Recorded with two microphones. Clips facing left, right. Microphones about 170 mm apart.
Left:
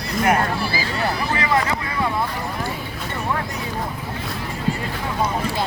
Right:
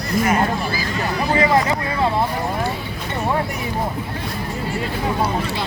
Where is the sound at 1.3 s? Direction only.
25° right (ahead or behind).